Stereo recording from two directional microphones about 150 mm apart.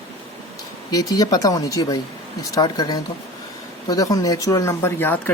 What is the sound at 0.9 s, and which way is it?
Speech, 25° left (ahead or behind).